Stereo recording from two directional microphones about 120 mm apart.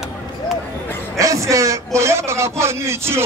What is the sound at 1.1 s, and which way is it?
A man's voice, 25° right (ahead or behind).